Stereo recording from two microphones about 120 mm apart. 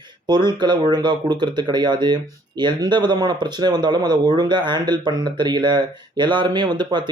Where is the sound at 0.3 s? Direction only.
35° right (ahead or behind).